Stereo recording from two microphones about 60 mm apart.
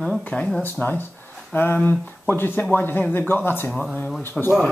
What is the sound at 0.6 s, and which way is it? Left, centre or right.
Speech, left.